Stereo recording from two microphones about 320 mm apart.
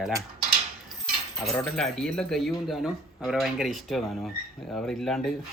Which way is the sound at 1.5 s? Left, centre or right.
Centre.